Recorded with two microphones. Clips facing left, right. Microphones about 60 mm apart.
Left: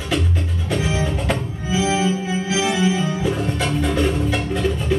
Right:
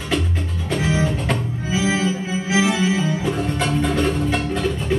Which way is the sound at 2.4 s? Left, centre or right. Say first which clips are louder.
Right 3 dB; right.